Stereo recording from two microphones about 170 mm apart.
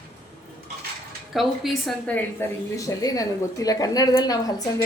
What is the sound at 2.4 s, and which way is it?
A woman's voice, 15° left (ahead or behind).